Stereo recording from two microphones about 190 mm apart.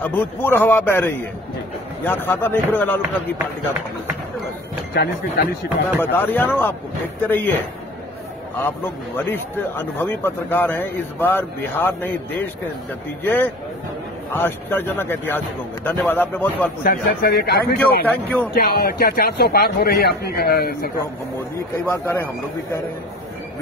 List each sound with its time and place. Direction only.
0.0 s a man's voice: 10° left (ahead or behind)
4.9 s a man's voice: 55° left (ahead or behind)
5.9 s a man's voice: 10° left (ahead or behind)
8.5 s a man's voice: 10° left (ahead or behind)
16.8 s a man's voice: 50° left (ahead or behind)
17.7 s a man's voice: 10° left (ahead or behind)
18.5 s a man's voice: 50° left (ahead or behind)
21.8 s a man's voice: 10° left (ahead or behind)